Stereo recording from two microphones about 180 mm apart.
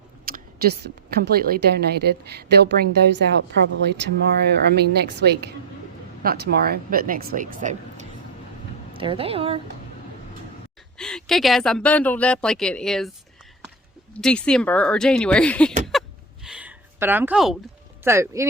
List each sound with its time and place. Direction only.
0.3 s a woman's voice: 55° right (ahead or behind)
8.9 s speech: 30° right (ahead or behind)
10.9 s speech: 5° left (ahead or behind)
14.1 s speech: 5° left (ahead or behind)
15.9 s a sound: centre (ahead or behind)
18.0 s speech: 15° right (ahead or behind)